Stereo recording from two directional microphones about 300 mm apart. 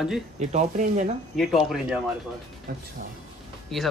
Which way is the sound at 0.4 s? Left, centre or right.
Right.